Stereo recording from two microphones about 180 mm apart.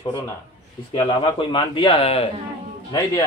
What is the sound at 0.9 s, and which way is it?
Speech, 30° left (ahead or behind).